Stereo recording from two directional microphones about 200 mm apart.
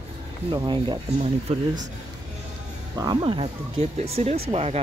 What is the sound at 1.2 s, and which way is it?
Speech, 35° right (ahead or behind).